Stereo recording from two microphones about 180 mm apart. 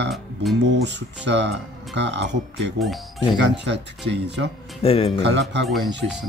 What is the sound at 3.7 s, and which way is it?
Speech, 75° right (ahead or behind).